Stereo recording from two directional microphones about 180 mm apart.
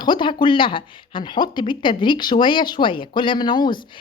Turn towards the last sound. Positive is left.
turn(degrees=25)  # may be behind; listen again after turning